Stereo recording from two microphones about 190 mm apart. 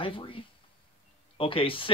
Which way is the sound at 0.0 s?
25° left (ahead or behind).